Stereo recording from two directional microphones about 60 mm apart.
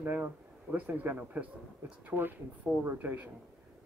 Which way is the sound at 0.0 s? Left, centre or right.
Right.